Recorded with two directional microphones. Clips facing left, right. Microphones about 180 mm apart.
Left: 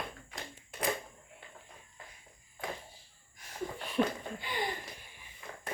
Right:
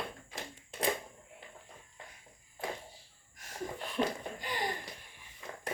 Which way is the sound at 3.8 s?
Centre (ahead or behind).